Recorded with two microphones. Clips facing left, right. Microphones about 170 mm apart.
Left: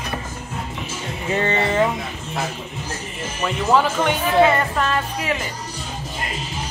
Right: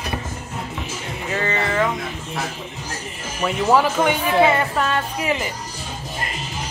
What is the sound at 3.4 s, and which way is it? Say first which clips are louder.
Speech: right 1 dB; 10° right (ahead or behind).